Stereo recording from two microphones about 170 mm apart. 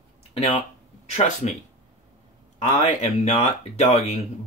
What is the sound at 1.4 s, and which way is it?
Speech, 45° left (ahead or behind).